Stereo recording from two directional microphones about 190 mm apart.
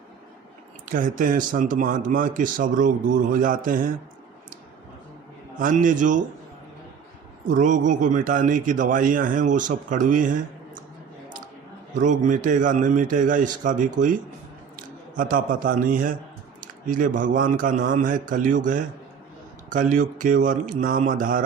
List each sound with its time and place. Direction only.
0.9 s speech: 45° right (ahead or behind)
5.5 s speech: 45° right (ahead or behind)
7.4 s speech: 40° right (ahead or behind)
11.9 s speech: 40° right (ahead or behind)